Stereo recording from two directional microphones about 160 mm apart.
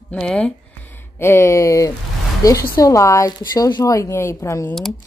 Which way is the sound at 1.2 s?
15° left (ahead or behind).